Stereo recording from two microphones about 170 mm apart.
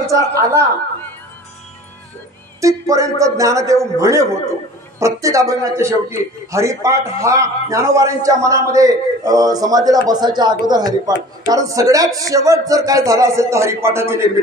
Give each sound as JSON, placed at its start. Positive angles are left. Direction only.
{"t": 0.0, "sound": "a man's voice", "side_deg": -20}
{"t": 2.6, "sound": "a man's voice", "side_deg": -20}